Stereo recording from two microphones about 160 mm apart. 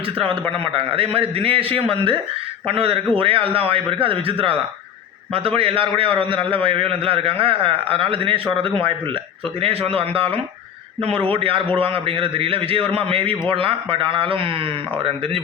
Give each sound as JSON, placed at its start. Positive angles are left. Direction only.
{"t": 0.6, "sound": "a man's voice", "side_deg": -35}